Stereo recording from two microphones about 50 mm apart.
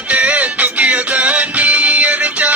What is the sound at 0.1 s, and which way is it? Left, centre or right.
Music, right.